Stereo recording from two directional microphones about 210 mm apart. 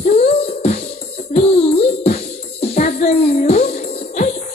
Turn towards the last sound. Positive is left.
turn(degrees=35)  # may be behind; listen again after turning